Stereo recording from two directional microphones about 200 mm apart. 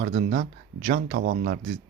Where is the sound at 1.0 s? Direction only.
55° right (ahead or behind).